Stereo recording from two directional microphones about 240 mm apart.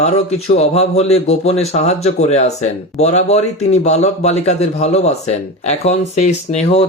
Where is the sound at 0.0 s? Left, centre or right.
Left.